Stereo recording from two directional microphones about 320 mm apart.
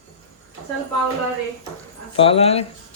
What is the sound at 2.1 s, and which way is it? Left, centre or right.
Speech, centre.